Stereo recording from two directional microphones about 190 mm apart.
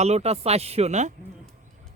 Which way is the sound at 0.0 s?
35° right (ahead or behind).